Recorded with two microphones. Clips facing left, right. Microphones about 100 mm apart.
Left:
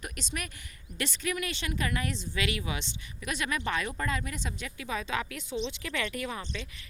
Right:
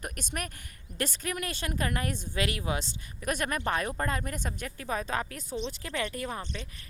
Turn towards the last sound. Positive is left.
turn(degrees=-40)  # may be behind; listen again after turning